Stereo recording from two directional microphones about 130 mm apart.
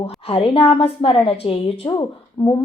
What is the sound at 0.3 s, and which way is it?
A woman's voice, 45° left (ahead or behind).